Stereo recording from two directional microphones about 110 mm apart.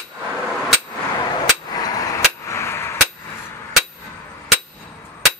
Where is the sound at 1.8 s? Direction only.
35° left (ahead or behind).